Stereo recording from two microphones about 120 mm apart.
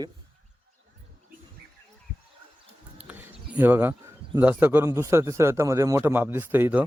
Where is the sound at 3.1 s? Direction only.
15° right (ahead or behind).